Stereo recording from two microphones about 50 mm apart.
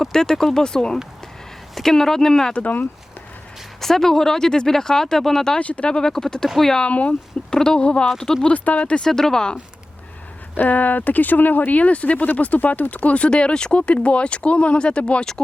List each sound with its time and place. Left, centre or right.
0.0 s speech: centre
2.5 s speech: left
3.8 s speech: centre
5.5 s speech: left
5.9 s speech: centre
6.8 s speech: left
7.5 s speech: centre
8.5 s speech: left
9.0 s speech: centre
10.6 s speech: left; by 15.4 s centre